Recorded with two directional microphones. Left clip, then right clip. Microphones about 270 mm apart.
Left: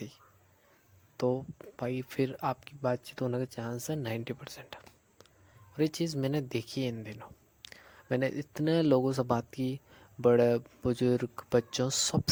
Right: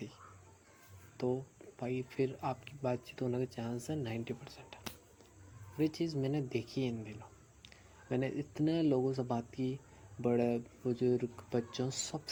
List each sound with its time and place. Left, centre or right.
1.1 s speech: left